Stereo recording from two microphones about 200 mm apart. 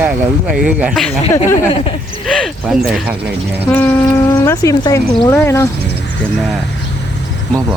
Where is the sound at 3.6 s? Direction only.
10° left (ahead or behind).